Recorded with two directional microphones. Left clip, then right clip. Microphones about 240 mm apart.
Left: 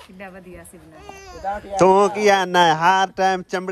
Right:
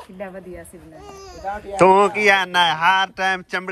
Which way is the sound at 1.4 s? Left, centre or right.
Left.